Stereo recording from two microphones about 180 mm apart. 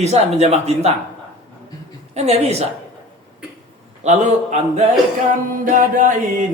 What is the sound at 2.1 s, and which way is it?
Speech, 35° right (ahead or behind).